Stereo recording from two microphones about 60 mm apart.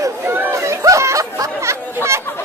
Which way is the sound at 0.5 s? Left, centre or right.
Right.